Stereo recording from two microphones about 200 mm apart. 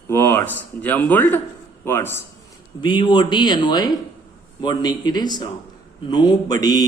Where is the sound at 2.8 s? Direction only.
25° left (ahead or behind).